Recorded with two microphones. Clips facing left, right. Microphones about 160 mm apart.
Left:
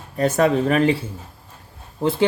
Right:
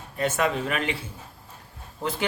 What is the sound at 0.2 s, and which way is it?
Speech, 35° left (ahead or behind).